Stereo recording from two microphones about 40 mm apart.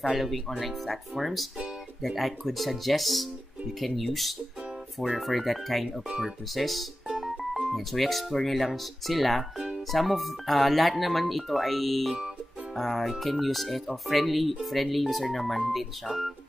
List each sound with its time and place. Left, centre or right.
0.0 s speech: centre
6.0 s speech: centre
6.5 s speech: centre